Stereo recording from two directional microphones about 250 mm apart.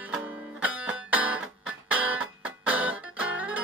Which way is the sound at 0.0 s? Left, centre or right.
Centre.